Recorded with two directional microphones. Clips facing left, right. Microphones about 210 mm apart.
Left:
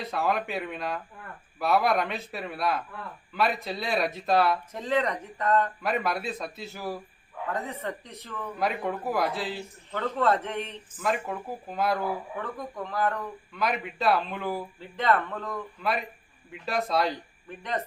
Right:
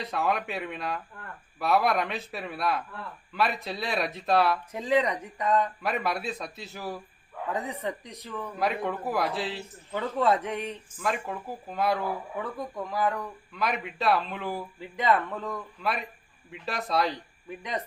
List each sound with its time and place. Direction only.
0.0 s a man's voice: centre (ahead or behind)
4.7 s speech: 10° right (ahead or behind)
5.8 s a man's voice: centre (ahead or behind)
7.5 s speech: 15° right (ahead or behind)
8.5 s a man's voice: centre (ahead or behind)
9.9 s speech: 10° right (ahead or behind)
11.0 s a man's voice: 5° left (ahead or behind)
12.4 s speech: 10° right (ahead or behind)
13.5 s a man's voice: centre (ahead or behind)
14.8 s speech: 10° right (ahead or behind)
15.8 s a man's voice: centre (ahead or behind)